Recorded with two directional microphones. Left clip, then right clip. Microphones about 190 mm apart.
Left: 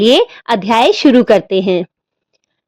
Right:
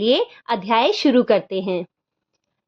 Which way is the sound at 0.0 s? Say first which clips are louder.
Left 9 dB; 40° left (ahead or behind).